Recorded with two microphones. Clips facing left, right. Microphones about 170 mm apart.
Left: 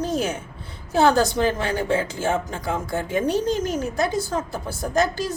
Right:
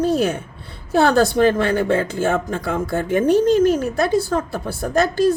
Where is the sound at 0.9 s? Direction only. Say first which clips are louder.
Right 3 dB; 60° right (ahead or behind).